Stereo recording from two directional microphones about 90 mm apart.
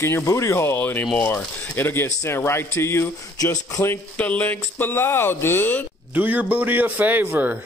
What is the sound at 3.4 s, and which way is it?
Speech, 40° left (ahead or behind).